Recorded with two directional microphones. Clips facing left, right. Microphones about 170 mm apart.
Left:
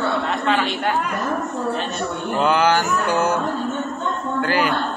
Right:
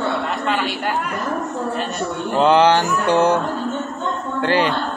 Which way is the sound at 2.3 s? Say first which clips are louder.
Right 4 dB; 30° right (ahead or behind).